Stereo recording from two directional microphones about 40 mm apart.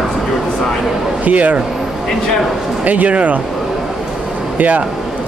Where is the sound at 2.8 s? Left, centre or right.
Right.